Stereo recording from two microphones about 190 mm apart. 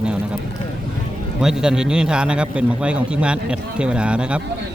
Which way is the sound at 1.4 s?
5° right (ahead or behind).